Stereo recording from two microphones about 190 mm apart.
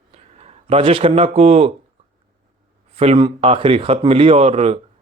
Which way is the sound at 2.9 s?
30° right (ahead or behind).